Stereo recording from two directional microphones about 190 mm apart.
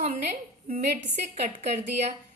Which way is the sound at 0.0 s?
40° right (ahead or behind).